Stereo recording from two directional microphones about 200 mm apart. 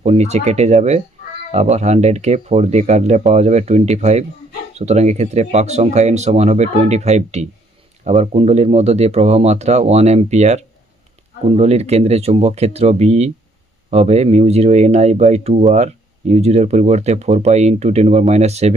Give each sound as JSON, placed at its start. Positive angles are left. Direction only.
{"t": 0.0, "sound": "speech", "side_deg": -35}